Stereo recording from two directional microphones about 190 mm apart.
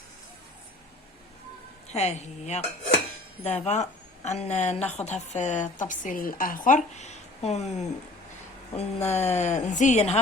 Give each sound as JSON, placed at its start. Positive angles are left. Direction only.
{"t": 1.9, "sound": "speech", "side_deg": 35}